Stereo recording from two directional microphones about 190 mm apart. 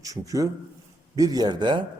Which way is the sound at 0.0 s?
20° right (ahead or behind).